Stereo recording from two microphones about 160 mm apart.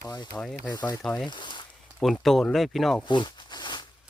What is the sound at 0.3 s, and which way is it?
Speech, centre (ahead or behind).